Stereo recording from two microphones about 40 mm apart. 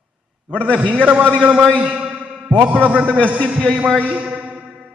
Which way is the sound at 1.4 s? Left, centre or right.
Right.